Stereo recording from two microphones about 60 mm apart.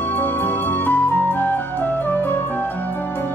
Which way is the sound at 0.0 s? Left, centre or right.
Left.